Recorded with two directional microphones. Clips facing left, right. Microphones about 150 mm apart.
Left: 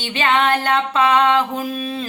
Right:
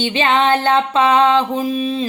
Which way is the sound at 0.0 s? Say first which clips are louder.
Right 3 dB; 25° right (ahead or behind).